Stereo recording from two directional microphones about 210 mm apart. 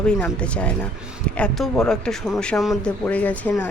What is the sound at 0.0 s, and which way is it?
Speech, 5° left (ahead or behind).